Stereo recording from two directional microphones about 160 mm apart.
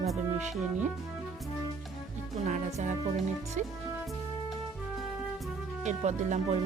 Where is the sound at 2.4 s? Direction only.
50° right (ahead or behind).